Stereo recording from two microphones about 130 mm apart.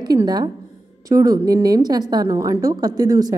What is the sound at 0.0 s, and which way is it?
A woman's voice, 30° right (ahead or behind).